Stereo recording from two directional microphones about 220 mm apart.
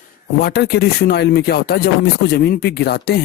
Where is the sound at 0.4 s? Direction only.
45° left (ahead or behind).